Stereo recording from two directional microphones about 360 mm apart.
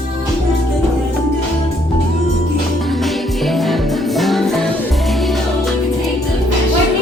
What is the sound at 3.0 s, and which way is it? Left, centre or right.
Music, centre.